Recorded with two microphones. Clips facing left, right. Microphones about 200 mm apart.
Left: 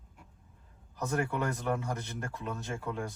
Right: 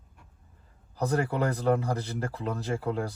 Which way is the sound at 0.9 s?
35° right (ahead or behind).